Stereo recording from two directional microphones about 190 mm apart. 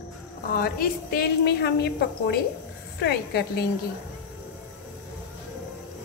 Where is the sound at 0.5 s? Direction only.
50° left (ahead or behind).